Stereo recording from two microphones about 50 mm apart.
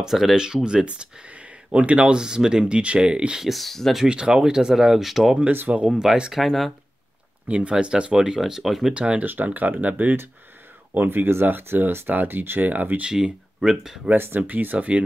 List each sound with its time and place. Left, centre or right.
0.0 s speech: centre
0.8 s speech: right
2.2 s speech: centre
3.4 s speech: centre
4.1 s speech: centre
6.3 s speech: centre
7.4 s speech: right
8.4 s speech: centre
8.9 s speech: right
9.2 s speech: right
13.0 s speech: centre
14.1 s speech: right